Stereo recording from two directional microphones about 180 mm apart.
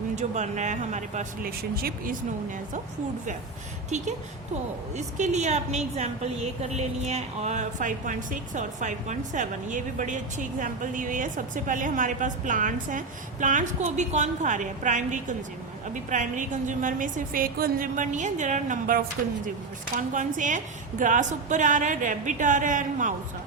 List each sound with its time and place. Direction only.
0.2 s speech: 40° right (ahead or behind); by 2.1 s 55° right (ahead or behind)
3.8 s a woman's voice: 40° right (ahead or behind)